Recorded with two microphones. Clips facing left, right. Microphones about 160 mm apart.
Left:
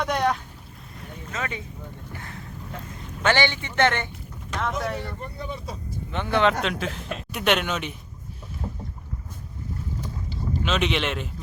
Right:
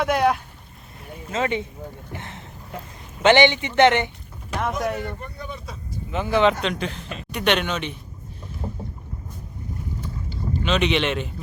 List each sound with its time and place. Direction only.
0.0 s speech: 5° right (ahead or behind)
1.3 s a man's voice: 25° right (ahead or behind)
5.2 s speech: 30° left (ahead or behind)
6.1 s speech: 5° right (ahead or behind)
8.6 s boat: 20° right (ahead or behind)
10.5 s speech: centre (ahead or behind)